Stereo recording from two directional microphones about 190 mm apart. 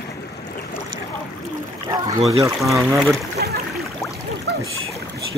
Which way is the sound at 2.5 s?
Centre (ahead or behind).